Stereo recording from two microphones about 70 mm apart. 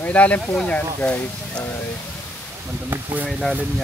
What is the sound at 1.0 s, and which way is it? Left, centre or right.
Speech, left.